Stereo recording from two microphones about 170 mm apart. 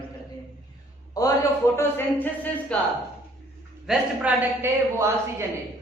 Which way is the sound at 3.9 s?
10° right (ahead or behind).